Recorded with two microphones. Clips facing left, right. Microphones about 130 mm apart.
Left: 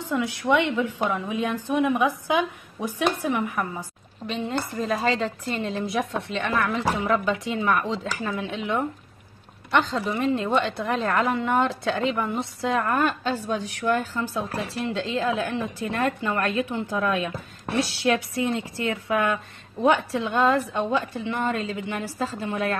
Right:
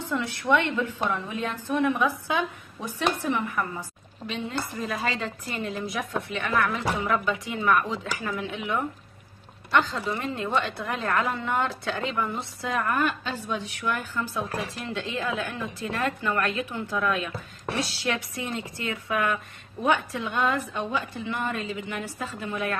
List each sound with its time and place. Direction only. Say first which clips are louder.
0.1 s a woman's voice: left 2 dB; 10° left (ahead or behind)
4.5 s a woman's voice: left 6 dB; 35° left (ahead or behind)